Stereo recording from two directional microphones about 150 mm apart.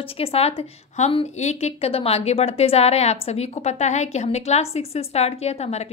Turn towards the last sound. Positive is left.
turn(degrees=45)  # may be behind; listen again after turning